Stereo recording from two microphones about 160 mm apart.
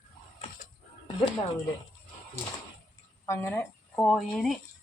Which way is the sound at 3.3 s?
15° left (ahead or behind).